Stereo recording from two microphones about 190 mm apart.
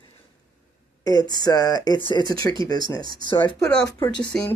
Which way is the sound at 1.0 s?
20° left (ahead or behind).